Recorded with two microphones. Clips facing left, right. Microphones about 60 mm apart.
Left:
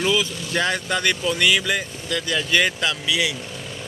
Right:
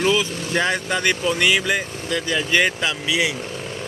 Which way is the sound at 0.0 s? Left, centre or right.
Centre.